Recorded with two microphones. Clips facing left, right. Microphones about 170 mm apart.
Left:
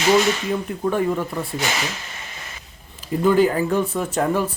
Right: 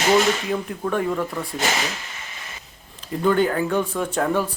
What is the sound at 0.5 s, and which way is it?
Speech, centre (ahead or behind).